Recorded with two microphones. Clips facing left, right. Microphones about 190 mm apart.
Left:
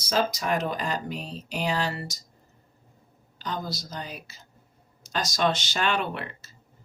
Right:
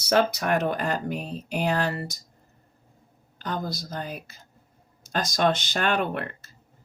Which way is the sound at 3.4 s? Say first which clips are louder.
Right 2 dB; 55° right (ahead or behind).